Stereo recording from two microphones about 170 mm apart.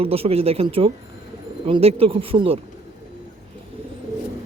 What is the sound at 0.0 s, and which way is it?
Speech, 35° right (ahead or behind).